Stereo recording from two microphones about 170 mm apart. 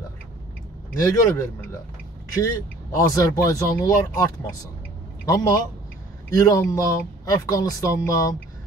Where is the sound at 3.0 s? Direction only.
20° left (ahead or behind).